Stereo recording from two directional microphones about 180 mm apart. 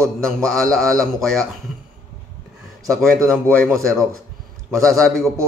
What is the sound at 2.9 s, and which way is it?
Speech, 5° left (ahead or behind).